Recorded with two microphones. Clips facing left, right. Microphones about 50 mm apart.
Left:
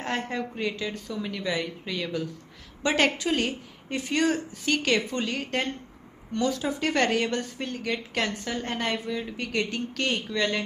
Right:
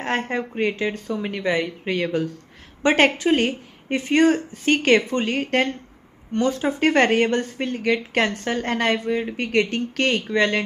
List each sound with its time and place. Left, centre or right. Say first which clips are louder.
0.0 s a woman's voice: right 5 dB; right
9.1 s speech: right 8 dB; right